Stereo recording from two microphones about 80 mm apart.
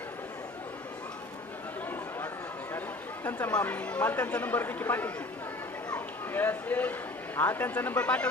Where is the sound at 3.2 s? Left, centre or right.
Centre.